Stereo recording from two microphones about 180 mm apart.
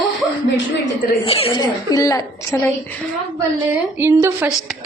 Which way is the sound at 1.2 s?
30° left (ahead or behind).